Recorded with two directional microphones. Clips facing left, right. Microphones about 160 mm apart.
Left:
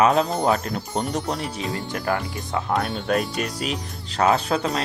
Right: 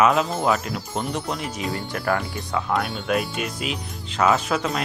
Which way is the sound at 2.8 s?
45° left (ahead or behind).